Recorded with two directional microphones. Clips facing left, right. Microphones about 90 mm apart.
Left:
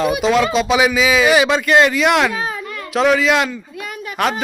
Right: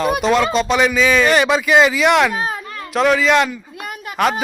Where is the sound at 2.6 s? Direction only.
30° right (ahead or behind).